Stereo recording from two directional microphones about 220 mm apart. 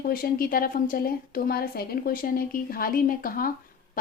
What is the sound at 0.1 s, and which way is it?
A woman's voice, 40° left (ahead or behind).